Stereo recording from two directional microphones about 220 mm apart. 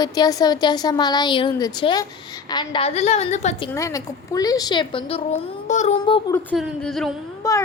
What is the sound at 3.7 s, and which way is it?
A woman's voice, 15° left (ahead or behind).